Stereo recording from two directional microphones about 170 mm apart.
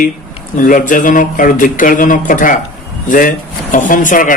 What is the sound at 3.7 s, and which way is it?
Speech, 50° left (ahead or behind).